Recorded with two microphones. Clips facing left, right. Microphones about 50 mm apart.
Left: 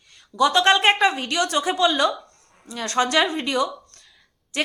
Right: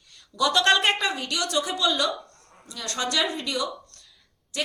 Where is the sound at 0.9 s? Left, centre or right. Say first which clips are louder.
Left 7 dB; left.